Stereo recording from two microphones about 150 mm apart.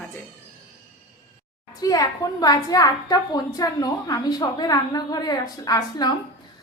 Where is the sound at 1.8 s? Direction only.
25° left (ahead or behind).